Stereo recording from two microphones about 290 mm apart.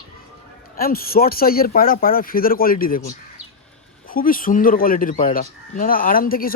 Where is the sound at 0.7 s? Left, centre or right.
Left.